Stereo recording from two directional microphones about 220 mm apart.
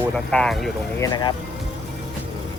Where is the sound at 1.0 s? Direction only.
20° left (ahead or behind).